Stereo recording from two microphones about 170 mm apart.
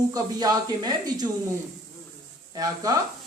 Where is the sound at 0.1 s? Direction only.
25° right (ahead or behind).